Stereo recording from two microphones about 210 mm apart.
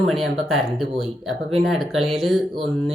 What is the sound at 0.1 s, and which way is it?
Speech, centre (ahead or behind).